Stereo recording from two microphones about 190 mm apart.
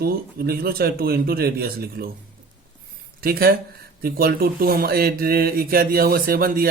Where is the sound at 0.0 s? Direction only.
50° right (ahead or behind).